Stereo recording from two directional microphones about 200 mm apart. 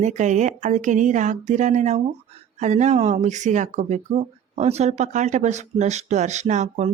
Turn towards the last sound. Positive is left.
turn(degrees=-35)  # may be behind; listen again after turning